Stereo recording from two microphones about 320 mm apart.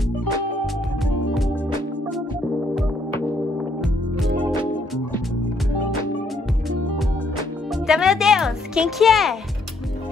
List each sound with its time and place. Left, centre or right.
2.7 s music: centre
7.7 s music: centre